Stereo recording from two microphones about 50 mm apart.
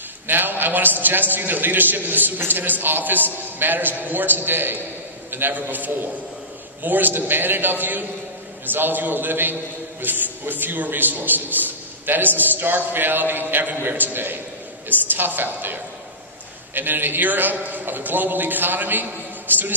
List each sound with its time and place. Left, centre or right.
0.3 s a man's voice: right